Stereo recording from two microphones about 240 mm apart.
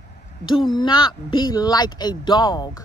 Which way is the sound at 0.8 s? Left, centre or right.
Centre.